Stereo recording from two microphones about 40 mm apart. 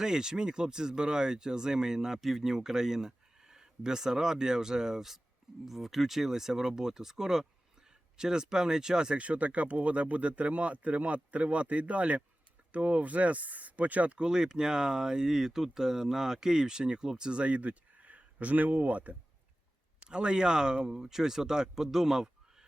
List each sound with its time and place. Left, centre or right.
0.0 s speech: centre
9.1 s speech: right
14.2 s speech: centre; by 19.1 s right
20.0 s speech: right